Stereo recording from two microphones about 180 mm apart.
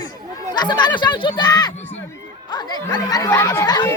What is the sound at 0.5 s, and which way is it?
Speech, 25° left (ahead or behind).